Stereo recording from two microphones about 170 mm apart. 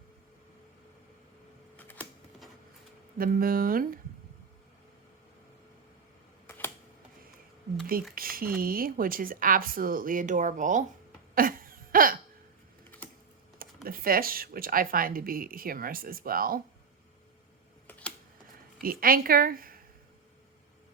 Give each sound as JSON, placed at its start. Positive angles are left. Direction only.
{"t": 1.7, "sound": "a sound", "side_deg": 10}
{"t": 3.2, "sound": "speech", "side_deg": -55}
{"t": 8.1, "sound": "speech", "side_deg": -60}
{"t": 11.3, "sound": "hiccup", "side_deg": -55}
{"t": 13.8, "sound": "speech", "side_deg": -60}
{"t": 18.8, "sound": "a woman's voice", "side_deg": -60}